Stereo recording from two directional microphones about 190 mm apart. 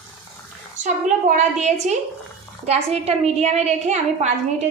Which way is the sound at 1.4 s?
35° right (ahead or behind).